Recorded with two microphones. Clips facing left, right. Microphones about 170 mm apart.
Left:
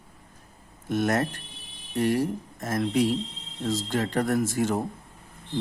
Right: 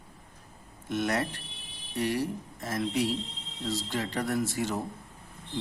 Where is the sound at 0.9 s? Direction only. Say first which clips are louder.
Left 4 dB; 50° left (ahead or behind).